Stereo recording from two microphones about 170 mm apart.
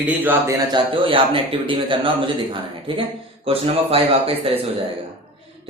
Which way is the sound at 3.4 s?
35° right (ahead or behind).